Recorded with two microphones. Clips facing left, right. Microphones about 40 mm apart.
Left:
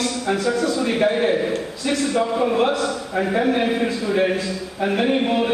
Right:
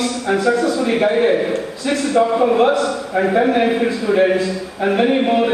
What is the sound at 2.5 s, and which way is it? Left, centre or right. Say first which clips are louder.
A man's voice: right 5 dB; centre.